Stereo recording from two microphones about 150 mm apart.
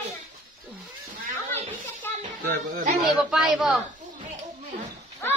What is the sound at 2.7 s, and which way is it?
Speech, 75° right (ahead or behind).